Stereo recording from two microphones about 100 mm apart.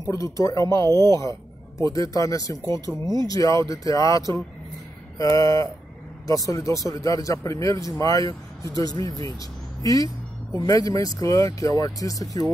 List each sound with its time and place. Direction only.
0.0 s speech: 30° left (ahead or behind)